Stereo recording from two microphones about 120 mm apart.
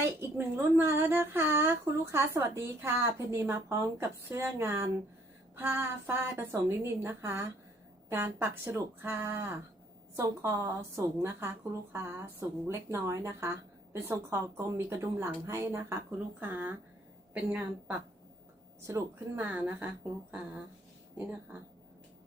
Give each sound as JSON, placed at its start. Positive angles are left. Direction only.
{"t": 0.0, "sound": "a woman's voice", "side_deg": -20}
{"t": 18.8, "sound": "speech", "side_deg": -25}
{"t": 21.2, "sound": "speech", "side_deg": -15}